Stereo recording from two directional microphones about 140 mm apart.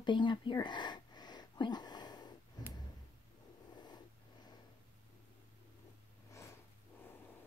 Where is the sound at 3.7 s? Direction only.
30° left (ahead or behind).